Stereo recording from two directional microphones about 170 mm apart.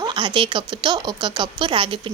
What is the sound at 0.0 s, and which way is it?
Speech, 30° right (ahead or behind).